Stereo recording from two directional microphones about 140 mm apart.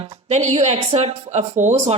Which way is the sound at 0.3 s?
50° right (ahead or behind).